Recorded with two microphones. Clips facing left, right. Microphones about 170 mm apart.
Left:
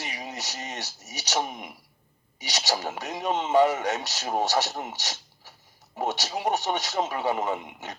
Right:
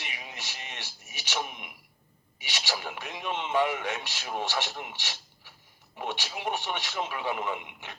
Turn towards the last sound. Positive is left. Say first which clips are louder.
# left 4 dB
turn(degrees=40)  # may be behind; listen again after turning